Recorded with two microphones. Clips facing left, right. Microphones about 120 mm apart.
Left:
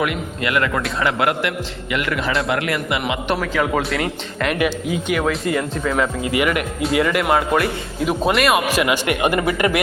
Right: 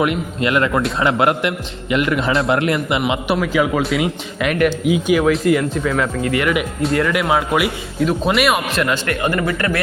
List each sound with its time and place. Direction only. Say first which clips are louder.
0.0 s a man's voice: right 4 dB; 25° right (ahead or behind)
3.4 s speech: right 3 dB; 5° right (ahead or behind); by 6.5 s 10° left (ahead or behind)
6.5 s speech: right 2 dB; centre (ahead or behind)
8.0 s speech: right 1 dB; 10° left (ahead or behind)